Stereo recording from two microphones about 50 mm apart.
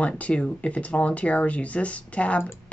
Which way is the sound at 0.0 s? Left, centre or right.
Left.